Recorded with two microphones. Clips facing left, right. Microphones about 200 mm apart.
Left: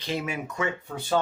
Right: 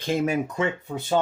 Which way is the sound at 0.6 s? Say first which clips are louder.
Right 4 dB; 20° right (ahead or behind).